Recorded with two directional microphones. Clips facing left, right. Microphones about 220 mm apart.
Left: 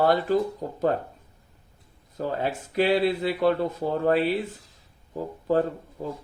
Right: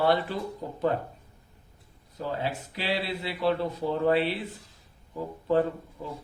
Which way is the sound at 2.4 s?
50° left (ahead or behind).